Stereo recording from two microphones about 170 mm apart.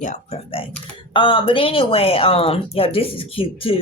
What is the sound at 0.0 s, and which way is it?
Speech, 40° left (ahead or behind).